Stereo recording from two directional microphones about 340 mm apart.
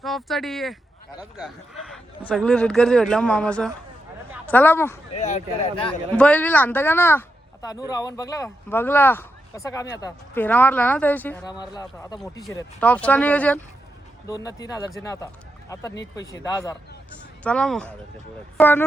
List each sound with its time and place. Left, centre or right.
0.0 s speech: centre
5.1 s speech: centre
5.9 s speech: centre